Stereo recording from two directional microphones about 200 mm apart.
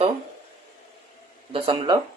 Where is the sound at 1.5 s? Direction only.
25° right (ahead or behind).